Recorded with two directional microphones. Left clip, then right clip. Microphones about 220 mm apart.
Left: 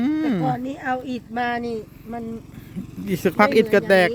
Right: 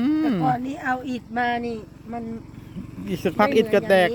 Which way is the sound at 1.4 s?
20° left (ahead or behind).